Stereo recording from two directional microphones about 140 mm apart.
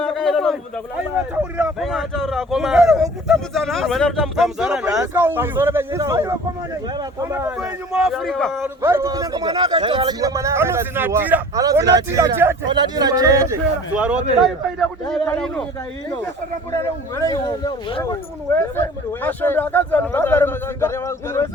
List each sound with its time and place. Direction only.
0.0 s a sound: 5° left (ahead or behind)
1.8 s a man's voice: centre (ahead or behind)
4.9 s a man's voice: 15° right (ahead or behind)
7.9 s a man's voice: centre (ahead or behind)
8.6 s a man's voice: 20° right (ahead or behind)
11.5 s a man's voice: 25° right (ahead or behind)
12.6 s a man's voice: 30° right (ahead or behind)
13.9 s a man's voice: 10° right (ahead or behind)
16.7 s speech: 20° left (ahead or behind)